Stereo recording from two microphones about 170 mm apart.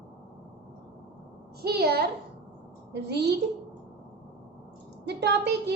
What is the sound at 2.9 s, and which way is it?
Speech, 80° right.